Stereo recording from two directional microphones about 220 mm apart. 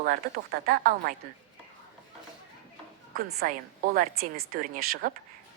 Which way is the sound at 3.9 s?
40° right (ahead or behind).